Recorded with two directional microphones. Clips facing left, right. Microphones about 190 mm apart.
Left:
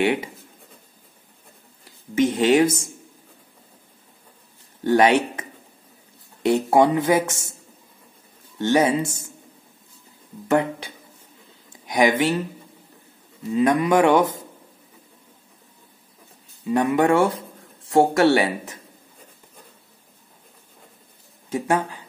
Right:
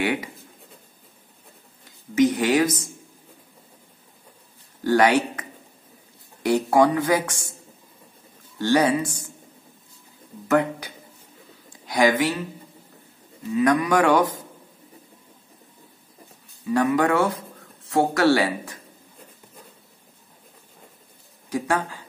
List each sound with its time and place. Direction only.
0.0 s speech: 25° left (ahead or behind)
2.1 s speech: 25° left (ahead or behind)
4.8 s speech: 25° left (ahead or behind)
8.5 s speech: 20° left (ahead or behind)
10.5 s speech: 25° left (ahead or behind)
13.5 s speech: 25° left (ahead or behind)
16.6 s speech: 25° left (ahead or behind)
21.5 s speech: 25° left (ahead or behind)